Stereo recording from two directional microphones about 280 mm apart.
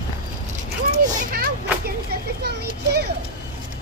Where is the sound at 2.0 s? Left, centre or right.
Right.